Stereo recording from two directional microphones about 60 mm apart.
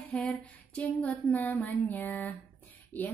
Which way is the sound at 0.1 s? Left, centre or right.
Left.